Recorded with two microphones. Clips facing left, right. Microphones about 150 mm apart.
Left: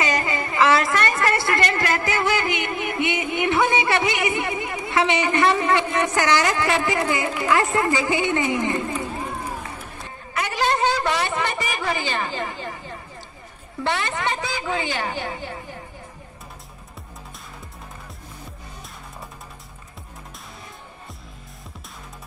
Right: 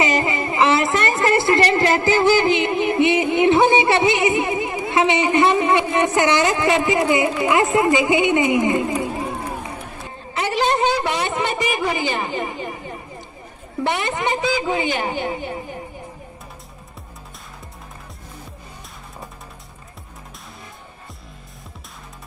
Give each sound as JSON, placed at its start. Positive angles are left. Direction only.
{"t": 0.0, "sound": "speech", "side_deg": -25}
{"t": 10.3, "sound": "a man's voice", "side_deg": -25}